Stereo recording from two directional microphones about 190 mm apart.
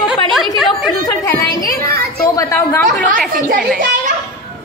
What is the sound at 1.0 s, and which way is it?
A woman's voice, 15° left (ahead or behind).